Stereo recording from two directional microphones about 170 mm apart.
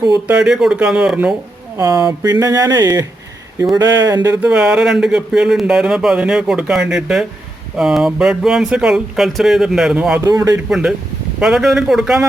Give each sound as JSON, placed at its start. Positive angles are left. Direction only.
{"t": 0.3, "sound": "speech", "side_deg": -5}
{"t": 1.8, "sound": "speech", "side_deg": -20}
{"t": 4.4, "sound": "speech", "side_deg": -5}
{"t": 10.2, "sound": "speech", "side_deg": -20}
{"t": 10.7, "sound": "speech", "side_deg": -5}